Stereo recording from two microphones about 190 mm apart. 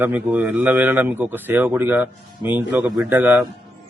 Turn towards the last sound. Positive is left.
turn(degrees=-10)  # may be behind; listen again after turning